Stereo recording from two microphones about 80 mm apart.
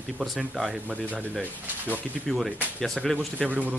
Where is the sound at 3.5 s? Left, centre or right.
Right.